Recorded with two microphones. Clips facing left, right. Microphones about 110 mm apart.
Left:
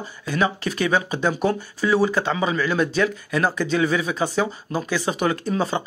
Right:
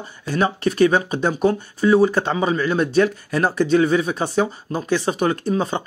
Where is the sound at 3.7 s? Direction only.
40° right (ahead or behind).